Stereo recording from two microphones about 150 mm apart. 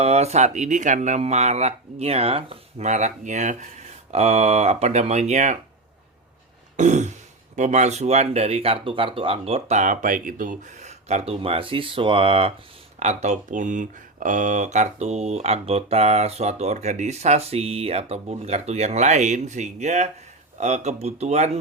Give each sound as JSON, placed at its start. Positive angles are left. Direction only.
{"t": 0.0, "sound": "speech", "side_deg": -45}
{"t": 6.7, "sound": "speech", "side_deg": -50}